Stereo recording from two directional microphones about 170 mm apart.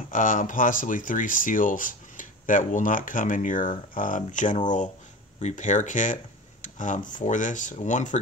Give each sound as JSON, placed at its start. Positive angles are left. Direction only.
{"t": 0.1, "sound": "speech", "side_deg": 50}